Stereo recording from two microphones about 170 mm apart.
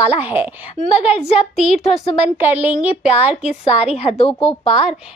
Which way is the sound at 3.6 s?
35° left (ahead or behind).